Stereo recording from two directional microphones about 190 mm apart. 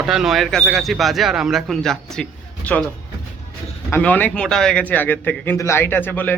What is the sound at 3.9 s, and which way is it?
A man's voice, 10° left (ahead or behind).